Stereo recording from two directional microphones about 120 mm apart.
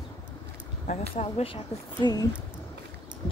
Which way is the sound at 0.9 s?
60° left (ahead or behind).